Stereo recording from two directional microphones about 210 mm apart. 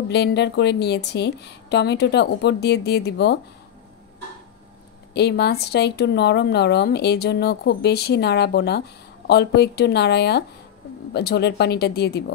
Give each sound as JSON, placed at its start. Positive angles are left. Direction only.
{"t": 0.1, "sound": "speech", "side_deg": 55}
{"t": 5.1, "sound": "speech", "side_deg": 50}